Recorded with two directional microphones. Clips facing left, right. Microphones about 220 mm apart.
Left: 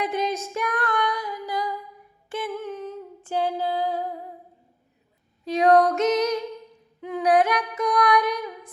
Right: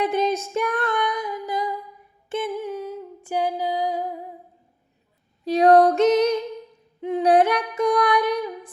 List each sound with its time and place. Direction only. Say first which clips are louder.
0.0 s female singing: right 4 dB; 30° right (ahead or behind)
2.3 s music: right 3 dB; 25° right (ahead or behind)
2.6 s humming: right 3 dB; 10° right (ahead or behind)
5.5 s music: right 3 dB; 35° right (ahead or behind)
7.0 s humming: right 3 dB; 25° right (ahead or behind)